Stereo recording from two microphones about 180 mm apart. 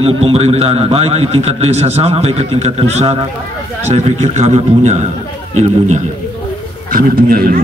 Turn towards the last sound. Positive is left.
turn(degrees=-55)  # may be behind; listen again after turning